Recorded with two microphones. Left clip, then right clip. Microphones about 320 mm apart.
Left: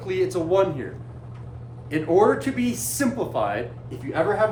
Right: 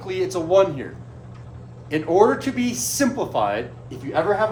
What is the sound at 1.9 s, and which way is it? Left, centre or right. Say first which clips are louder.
A woman's voice: right 2 dB; centre.